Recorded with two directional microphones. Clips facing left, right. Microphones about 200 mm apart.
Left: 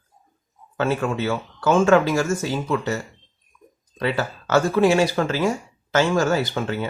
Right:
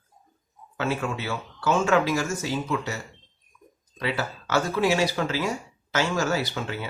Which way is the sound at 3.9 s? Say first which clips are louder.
Left 5 dB; 50° left (ahead or behind).